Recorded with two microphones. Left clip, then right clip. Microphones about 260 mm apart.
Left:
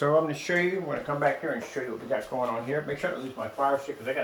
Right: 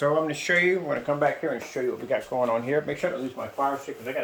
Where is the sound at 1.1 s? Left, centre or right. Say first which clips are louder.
Right 5 dB; right.